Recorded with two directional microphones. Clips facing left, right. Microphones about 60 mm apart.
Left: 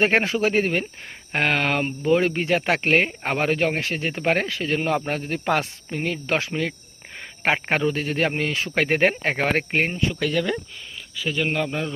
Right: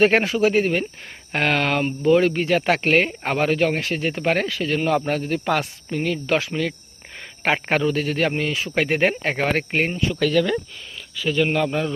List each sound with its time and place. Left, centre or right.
0.0 s speech: left
1.3 s speech: left
9.9 s speech: left